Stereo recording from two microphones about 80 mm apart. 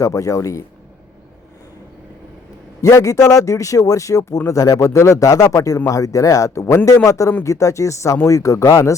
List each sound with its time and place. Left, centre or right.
0.0 s speech: left
2.8 s speech: left